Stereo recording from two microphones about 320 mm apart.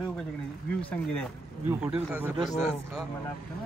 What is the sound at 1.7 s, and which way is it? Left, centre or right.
Speech, centre.